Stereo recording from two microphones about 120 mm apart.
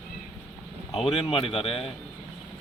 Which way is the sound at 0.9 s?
55° left (ahead or behind).